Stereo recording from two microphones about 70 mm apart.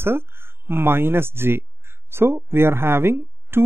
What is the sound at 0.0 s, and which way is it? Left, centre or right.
Speech, right.